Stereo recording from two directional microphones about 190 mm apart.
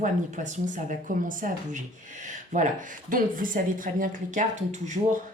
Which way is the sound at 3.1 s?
45° right (ahead or behind).